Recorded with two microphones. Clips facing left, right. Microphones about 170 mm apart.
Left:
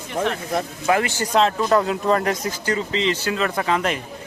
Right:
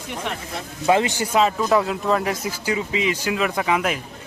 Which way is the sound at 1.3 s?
5° right (ahead or behind).